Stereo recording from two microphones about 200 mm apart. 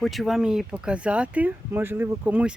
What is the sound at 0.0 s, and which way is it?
Speech, centre (ahead or behind).